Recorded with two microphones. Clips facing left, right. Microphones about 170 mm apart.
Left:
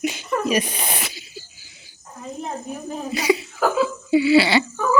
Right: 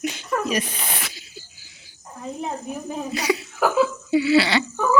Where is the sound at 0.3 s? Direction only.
10° left (ahead or behind).